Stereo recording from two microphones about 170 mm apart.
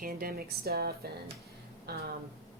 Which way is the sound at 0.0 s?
60° right (ahead or behind).